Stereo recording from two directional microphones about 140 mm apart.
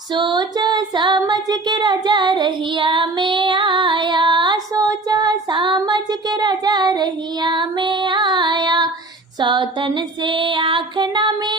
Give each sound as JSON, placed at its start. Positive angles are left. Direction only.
{"t": 0.1, "sound": "female singing", "side_deg": -30}
{"t": 1.2, "sound": "child singing", "side_deg": -30}
{"t": 9.4, "sound": "female singing", "side_deg": -35}